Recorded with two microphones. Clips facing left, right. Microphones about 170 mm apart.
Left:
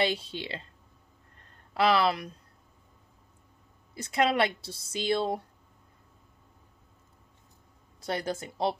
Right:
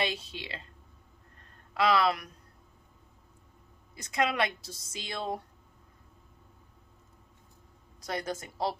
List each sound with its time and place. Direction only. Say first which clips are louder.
0.0 s speech: left 5 dB; 30° left (ahead or behind)
1.7 s speech: left 2 dB; 30° left (ahead or behind)
3.9 s speech: left 4 dB; 30° left (ahead or behind)
8.0 s speech: left 3 dB; 30° left (ahead or behind)